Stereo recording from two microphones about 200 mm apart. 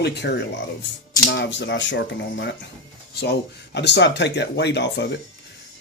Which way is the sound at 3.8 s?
60° left (ahead or behind).